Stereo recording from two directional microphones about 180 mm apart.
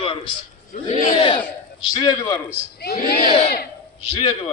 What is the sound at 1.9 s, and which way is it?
Speech, 25° left (ahead or behind).